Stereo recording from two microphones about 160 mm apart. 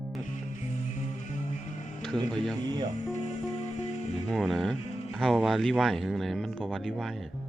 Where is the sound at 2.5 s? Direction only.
25° right (ahead or behind).